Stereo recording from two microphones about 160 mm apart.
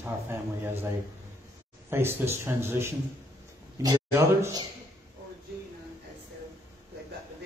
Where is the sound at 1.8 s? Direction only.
15° right (ahead or behind).